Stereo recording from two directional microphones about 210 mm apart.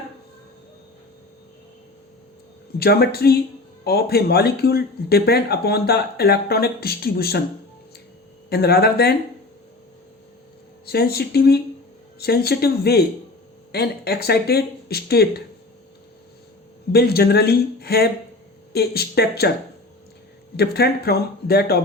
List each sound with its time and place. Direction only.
2.7 s speech: 50° left (ahead or behind)
8.4 s speech: 50° left (ahead or behind)
10.8 s speech: 50° left (ahead or behind)
16.9 s speech: 50° left (ahead or behind)
20.6 s speech: 50° left (ahead or behind)